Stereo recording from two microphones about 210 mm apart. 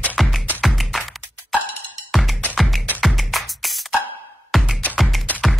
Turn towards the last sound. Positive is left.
turn(degrees=0)  # may be behind; listen again after turning